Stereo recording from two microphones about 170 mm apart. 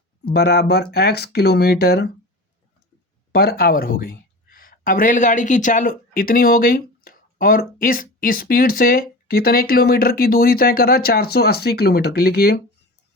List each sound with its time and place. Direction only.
0.3 s speech: 70° left (ahead or behind)
3.3 s speech: 65° left (ahead or behind)